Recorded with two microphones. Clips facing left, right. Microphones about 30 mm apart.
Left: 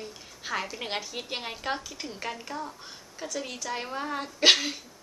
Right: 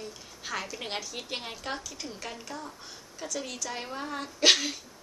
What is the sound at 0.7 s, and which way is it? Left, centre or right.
A woman's voice, centre.